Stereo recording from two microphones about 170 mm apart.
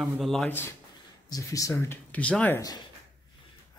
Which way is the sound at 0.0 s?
Centre (ahead or behind).